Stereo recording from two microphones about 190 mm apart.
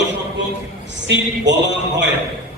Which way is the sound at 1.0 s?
70° right (ahead or behind).